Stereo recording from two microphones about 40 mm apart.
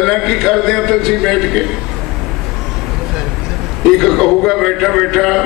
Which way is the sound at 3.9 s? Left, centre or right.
Centre.